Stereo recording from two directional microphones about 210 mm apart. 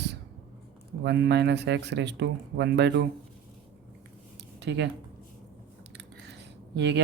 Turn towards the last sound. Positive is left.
turn(degrees=-55)  # may be behind; listen again after turning